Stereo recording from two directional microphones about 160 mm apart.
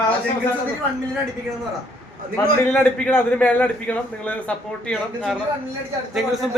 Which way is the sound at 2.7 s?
10° left (ahead or behind).